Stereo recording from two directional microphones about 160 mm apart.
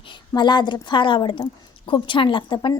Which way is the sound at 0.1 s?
30° left (ahead or behind).